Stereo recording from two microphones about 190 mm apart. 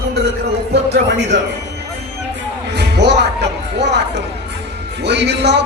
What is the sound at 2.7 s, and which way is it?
Music, 60° right (ahead or behind).